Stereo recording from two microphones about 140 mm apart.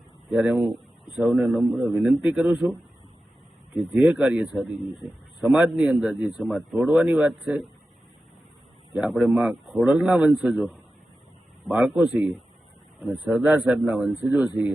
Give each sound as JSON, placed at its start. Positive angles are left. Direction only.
{"t": 0.3, "sound": "a man's voice", "side_deg": -5}
{"t": 3.9, "sound": "a man's voice", "side_deg": -10}
{"t": 9.0, "sound": "a man's voice", "side_deg": 0}
{"t": 11.9, "sound": "a man's voice", "side_deg": -10}
{"t": 13.3, "sound": "a man's voice", "side_deg": -5}